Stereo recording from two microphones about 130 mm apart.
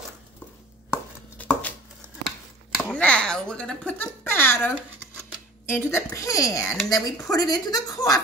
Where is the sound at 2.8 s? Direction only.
10° left (ahead or behind).